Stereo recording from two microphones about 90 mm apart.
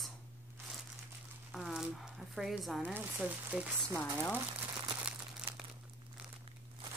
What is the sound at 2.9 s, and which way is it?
Speech, 15° right (ahead or behind).